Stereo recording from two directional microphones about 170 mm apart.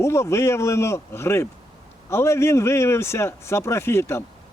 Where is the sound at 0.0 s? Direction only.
15° left (ahead or behind).